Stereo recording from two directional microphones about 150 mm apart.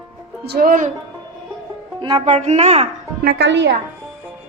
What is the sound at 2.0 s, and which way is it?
Speech, 35° right (ahead or behind).